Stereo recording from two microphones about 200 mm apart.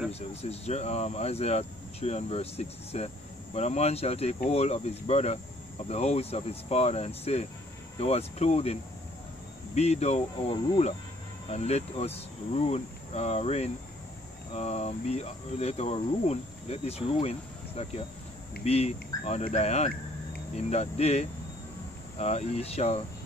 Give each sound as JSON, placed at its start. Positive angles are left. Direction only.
{"t": 0.1, "sound": "speech", "side_deg": 30}
{"t": 9.8, "sound": "speech", "side_deg": 30}